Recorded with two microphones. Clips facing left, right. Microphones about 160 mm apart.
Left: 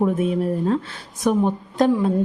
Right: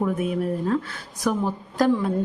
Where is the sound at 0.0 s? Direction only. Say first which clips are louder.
Left 4 dB; 25° left (ahead or behind).